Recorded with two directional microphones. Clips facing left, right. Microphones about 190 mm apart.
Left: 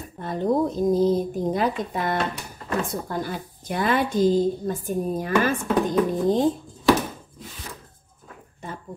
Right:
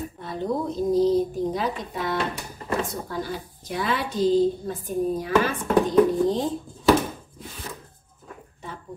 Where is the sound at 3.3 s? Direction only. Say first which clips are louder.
Left 1 dB; 55° left (ahead or behind).